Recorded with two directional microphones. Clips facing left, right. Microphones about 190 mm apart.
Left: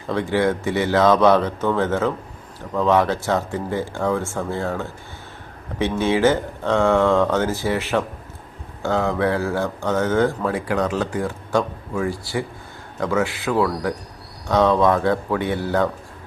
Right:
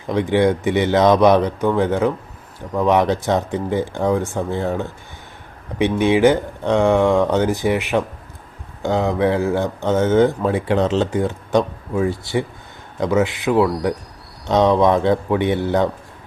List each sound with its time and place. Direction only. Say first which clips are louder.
0.1 s speech: right 4 dB; 15° right (ahead or behind)